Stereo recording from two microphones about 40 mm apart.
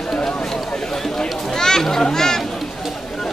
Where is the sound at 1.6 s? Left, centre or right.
Centre.